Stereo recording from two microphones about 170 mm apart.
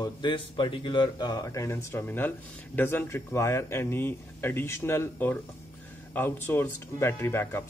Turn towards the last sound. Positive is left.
turn(degrees=15)  # may be behind; listen again after turning